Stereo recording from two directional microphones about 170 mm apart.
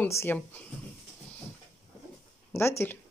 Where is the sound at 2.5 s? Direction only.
15° left (ahead or behind).